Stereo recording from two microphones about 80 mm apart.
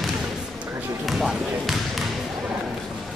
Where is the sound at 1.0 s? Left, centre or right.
Centre.